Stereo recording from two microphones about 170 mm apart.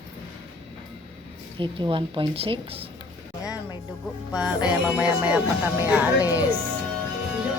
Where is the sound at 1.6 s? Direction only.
30° right (ahead or behind).